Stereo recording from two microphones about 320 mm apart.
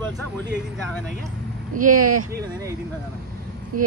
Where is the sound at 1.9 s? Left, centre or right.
Right.